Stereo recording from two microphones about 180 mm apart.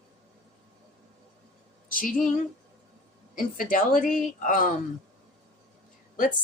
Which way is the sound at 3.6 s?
50° left (ahead or behind).